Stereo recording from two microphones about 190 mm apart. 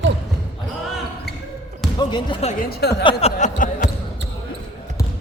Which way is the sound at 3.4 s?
45° left (ahead or behind).